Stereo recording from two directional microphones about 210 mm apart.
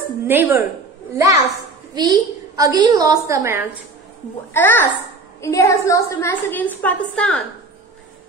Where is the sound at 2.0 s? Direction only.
15° right (ahead or behind).